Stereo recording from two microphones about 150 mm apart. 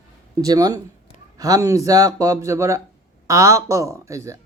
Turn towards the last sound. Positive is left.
turn(degrees=-20)  # may be behind; listen again after turning